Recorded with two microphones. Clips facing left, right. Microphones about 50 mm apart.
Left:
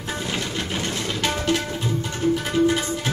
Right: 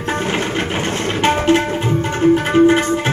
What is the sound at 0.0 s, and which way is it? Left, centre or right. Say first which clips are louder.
Tabla: right 8 dB; right.